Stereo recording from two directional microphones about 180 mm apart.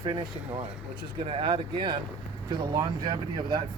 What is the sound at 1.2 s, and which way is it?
Speech, 30° right (ahead or behind).